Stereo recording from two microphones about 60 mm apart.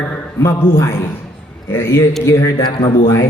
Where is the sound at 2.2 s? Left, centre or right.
Left.